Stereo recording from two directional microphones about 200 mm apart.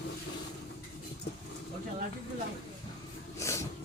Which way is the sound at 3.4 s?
15° left (ahead or behind).